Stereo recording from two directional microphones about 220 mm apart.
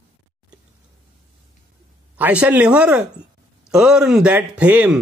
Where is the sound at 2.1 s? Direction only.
5° right (ahead or behind).